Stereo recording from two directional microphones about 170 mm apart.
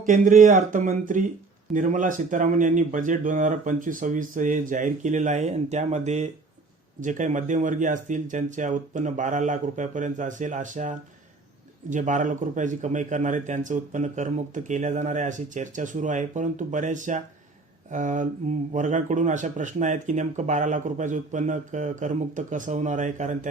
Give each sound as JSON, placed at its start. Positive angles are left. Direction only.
{"t": 0.0, "sound": "a man's voice", "side_deg": -50}